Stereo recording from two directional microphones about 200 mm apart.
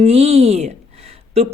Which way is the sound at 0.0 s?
30° right (ahead or behind).